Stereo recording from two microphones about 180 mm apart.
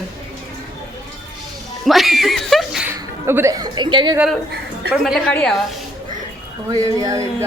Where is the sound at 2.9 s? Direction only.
15° right (ahead or behind).